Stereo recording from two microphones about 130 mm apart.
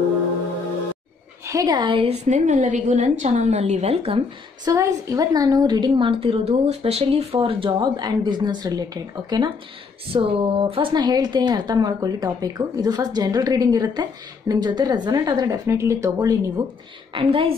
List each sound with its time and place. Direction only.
1.4 s a woman's voice: 25° right (ahead or behind)
1.8 s a woman's voice: 40° right (ahead or behind)
2.2 s a woman's voice: 70° right (ahead or behind); by 4.2 s 50° right (ahead or behind)
4.6 s a woman's voice: 25° right (ahead or behind)
10.1 s a woman's voice: 45° right (ahead or behind); by 16.6 s 30° right (ahead or behind)
17.1 s a woman's voice: 45° right (ahead or behind)